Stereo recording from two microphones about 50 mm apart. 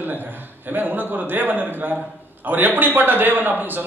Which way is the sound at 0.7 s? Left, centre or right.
Right.